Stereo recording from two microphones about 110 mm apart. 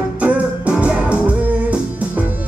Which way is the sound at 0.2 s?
10° right (ahead or behind).